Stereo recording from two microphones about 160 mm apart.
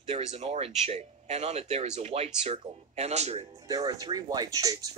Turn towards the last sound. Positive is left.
turn(degrees=-20)  # may be behind; listen again after turning